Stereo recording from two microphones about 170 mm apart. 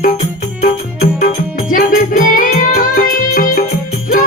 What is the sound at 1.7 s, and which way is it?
Music, 55° left (ahead or behind).